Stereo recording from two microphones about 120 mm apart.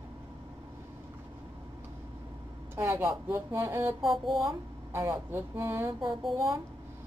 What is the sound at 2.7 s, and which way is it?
A woman's voice, 20° right (ahead or behind).